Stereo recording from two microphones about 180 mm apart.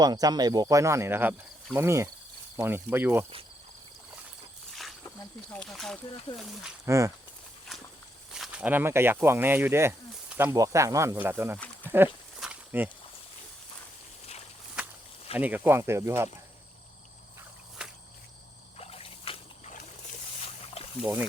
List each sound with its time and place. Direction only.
0.0 s speech: 20° right (ahead or behind)
4.7 s snake: centre (ahead or behind)
5.0 s speech: 5° left (ahead or behind)
6.8 s speech: 15° right (ahead or behind)
8.3 s speech: 5° right (ahead or behind)
11.5 s a sound: 10° left (ahead or behind)
12.4 s a sound: 10° right (ahead or behind)
15.4 s speech: 10° right (ahead or behind)
18.8 s a sound: 35° left (ahead or behind)